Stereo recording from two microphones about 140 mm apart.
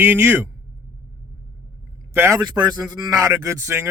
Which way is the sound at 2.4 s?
30° right (ahead or behind).